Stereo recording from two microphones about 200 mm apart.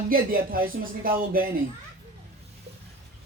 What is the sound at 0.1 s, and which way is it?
Speech, 45° right (ahead or behind).